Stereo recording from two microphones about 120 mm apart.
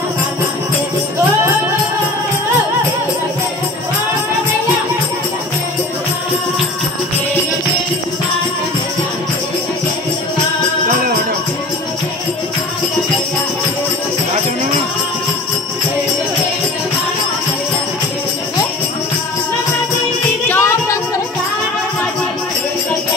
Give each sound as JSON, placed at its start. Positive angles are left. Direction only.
{"t": 20.4, "sound": "music", "side_deg": 20}